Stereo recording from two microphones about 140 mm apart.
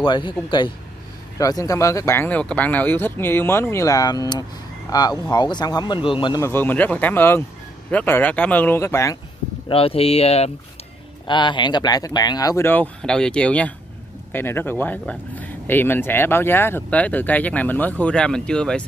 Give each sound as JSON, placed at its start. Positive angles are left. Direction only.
{"t": 0.0, "sound": "speech", "side_deg": 35}
{"t": 6.4, "sound": "speech", "side_deg": 15}
{"t": 9.7, "sound": "speech", "side_deg": 40}
{"t": 11.2, "sound": "speech", "side_deg": 35}